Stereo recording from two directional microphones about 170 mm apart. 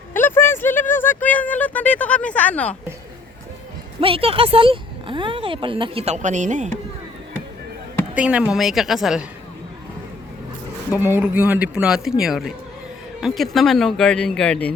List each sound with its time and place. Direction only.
0.1 s a sound: 10° left (ahead or behind)
4.0 s speech: 35° right (ahead or behind)
8.1 s speech: 5° right (ahead or behind)
11.0 s speech: 10° right (ahead or behind); by 14.7 s 5° left (ahead or behind)